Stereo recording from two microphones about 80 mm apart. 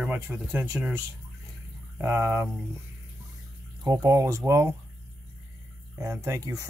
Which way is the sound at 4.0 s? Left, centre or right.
Right.